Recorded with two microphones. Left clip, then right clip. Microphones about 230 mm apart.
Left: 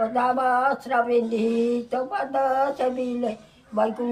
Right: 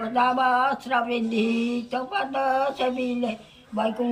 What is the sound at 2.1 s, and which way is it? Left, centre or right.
Speech, centre.